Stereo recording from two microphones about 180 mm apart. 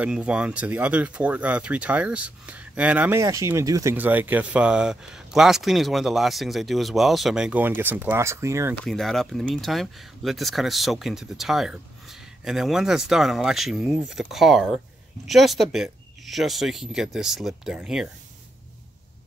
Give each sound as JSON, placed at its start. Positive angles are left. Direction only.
{"t": 0.0, "sound": "speech", "side_deg": -5}
{"t": 8.8, "sound": "speech", "side_deg": 0}